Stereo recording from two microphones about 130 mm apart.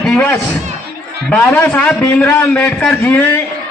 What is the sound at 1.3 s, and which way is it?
A man's voice, 15° left (ahead or behind).